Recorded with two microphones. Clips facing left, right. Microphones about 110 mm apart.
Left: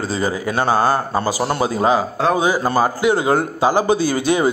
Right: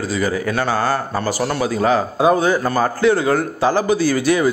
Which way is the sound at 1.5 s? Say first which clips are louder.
Even; 25° left (ahead or behind).